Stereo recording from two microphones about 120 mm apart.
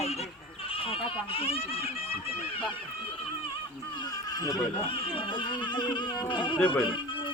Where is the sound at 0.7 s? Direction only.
50° left (ahead or behind).